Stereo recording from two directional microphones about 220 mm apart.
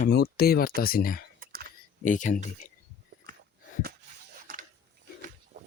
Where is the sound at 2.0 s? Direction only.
35° left (ahead or behind).